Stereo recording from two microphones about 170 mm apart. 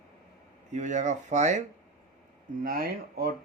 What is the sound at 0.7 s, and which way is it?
Speech, 45° right (ahead or behind).